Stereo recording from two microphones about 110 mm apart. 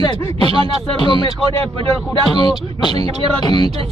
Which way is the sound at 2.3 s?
45° left (ahead or behind).